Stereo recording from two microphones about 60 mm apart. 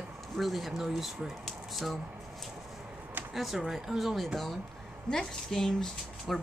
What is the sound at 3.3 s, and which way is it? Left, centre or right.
Speech, centre.